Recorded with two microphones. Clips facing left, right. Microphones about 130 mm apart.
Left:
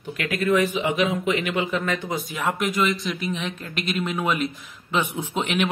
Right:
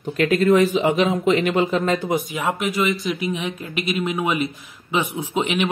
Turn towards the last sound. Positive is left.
turn(degrees=-5)  # may be behind; listen again after turning